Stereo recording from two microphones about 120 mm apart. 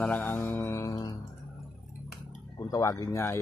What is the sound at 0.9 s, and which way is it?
Music, 35° left (ahead or behind).